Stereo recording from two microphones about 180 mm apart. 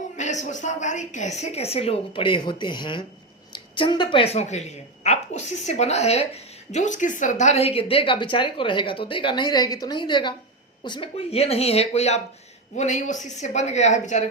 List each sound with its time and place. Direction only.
0.2 s a woman's voice: 40° left (ahead or behind)